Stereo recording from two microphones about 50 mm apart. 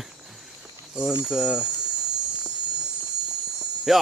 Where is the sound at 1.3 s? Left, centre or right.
Centre.